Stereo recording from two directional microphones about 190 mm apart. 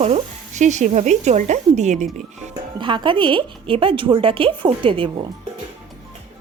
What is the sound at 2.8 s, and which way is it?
A woman's voice, 25° right (ahead or behind).